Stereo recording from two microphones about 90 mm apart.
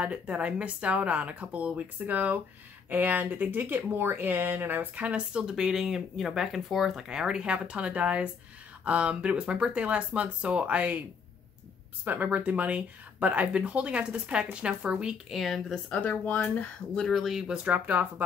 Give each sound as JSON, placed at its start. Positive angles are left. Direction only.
{"t": 0.0, "sound": "speech", "side_deg": -15}
{"t": 12.0, "sound": "speech", "side_deg": -20}
{"t": 15.7, "sound": "speech", "side_deg": 15}
{"t": 17.0, "sound": "speech", "side_deg": 0}
{"t": 17.7, "sound": "speech", "side_deg": -20}